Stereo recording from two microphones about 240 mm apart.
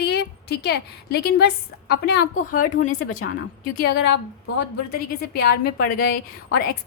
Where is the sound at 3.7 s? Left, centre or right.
Left.